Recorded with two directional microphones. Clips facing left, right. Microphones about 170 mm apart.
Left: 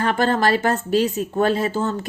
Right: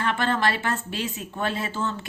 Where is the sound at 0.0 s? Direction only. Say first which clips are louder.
Left 5 dB; 40° left (ahead or behind).